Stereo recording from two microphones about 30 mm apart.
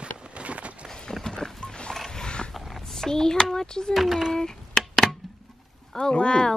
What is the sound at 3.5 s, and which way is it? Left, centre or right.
Speech, left.